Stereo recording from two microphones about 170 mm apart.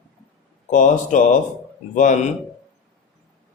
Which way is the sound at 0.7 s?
50° left (ahead or behind).